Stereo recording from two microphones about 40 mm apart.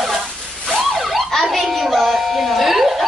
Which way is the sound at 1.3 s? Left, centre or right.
Centre.